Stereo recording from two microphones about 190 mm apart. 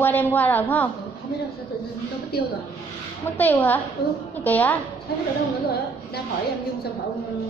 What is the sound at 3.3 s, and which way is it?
A woman's voice, 10° left (ahead or behind).